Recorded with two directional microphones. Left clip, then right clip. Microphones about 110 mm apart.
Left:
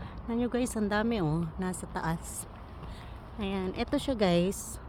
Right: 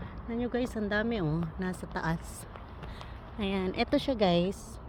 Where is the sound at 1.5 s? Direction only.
10° left (ahead or behind).